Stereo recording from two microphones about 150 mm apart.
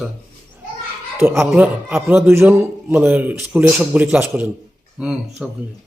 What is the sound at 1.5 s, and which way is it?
A man's voice, 5° right (ahead or behind).